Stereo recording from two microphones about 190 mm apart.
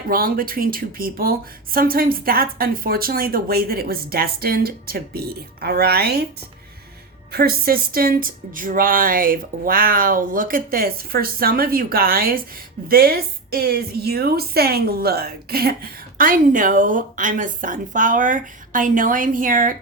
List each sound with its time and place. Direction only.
0.1 s a woman's voice: 50° right (ahead or behind)
7.3 s a woman's voice: 55° right (ahead or behind)